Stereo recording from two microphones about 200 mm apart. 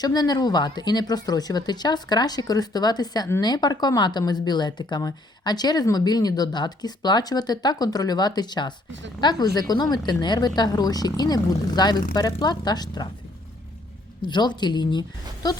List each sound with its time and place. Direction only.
0.0 s speech: 20° left (ahead or behind)
8.9 s speech: 65° right (ahead or behind)
9.6 s speech: 20° left (ahead or behind)
14.2 s speech: 20° left (ahead or behind)